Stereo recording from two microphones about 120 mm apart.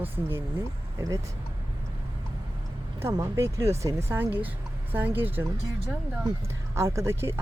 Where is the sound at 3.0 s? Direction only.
25° right (ahead or behind).